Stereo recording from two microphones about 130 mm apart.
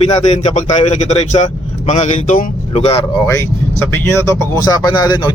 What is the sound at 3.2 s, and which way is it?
Speech, 25° left (ahead or behind).